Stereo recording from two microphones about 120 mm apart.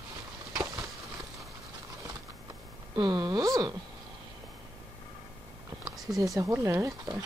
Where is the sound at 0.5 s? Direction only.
25° right (ahead or behind).